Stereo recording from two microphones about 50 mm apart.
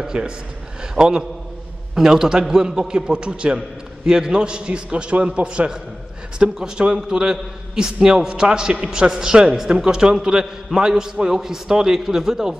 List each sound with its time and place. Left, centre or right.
0.0 s a man's voice: centre